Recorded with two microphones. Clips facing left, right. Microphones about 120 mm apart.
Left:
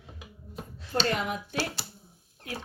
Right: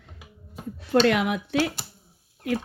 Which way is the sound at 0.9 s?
65° right (ahead or behind).